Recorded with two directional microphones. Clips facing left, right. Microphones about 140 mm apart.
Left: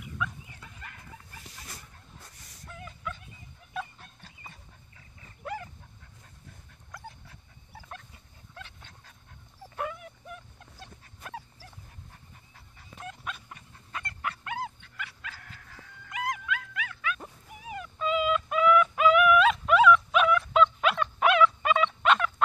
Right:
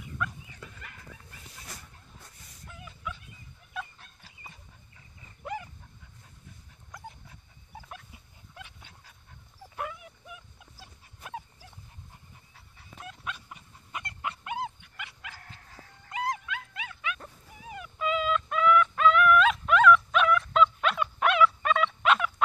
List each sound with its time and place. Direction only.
2.8 s dog: 5° right (ahead or behind)
6.9 s dog: 20° right (ahead or behind)
12.5 s dog: centre (ahead or behind); by 15.4 s 20° right (ahead or behind)
15.4 s dog: 30° right (ahead or behind)
17.7 s music: 5° right (ahead or behind)